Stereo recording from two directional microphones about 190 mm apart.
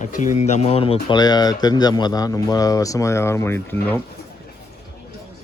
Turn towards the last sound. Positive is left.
turn(degrees=10)  # may be behind; listen again after turning